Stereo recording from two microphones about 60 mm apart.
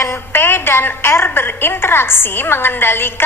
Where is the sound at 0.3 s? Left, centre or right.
Left.